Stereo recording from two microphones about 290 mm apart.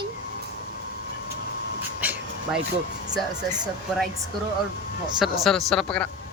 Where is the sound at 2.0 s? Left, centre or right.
Centre.